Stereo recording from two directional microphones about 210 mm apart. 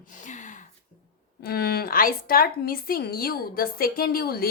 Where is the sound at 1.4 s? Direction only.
50° left (ahead or behind).